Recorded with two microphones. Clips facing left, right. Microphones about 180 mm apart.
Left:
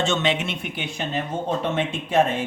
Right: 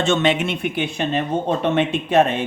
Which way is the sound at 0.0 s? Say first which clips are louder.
Right 4 dB; 55° right (ahead or behind).